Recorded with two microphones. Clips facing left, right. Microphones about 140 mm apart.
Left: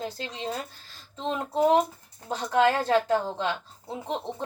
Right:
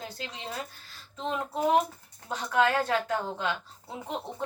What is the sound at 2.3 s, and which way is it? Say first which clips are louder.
Speech: left 3 dB; 30° left (ahead or behind).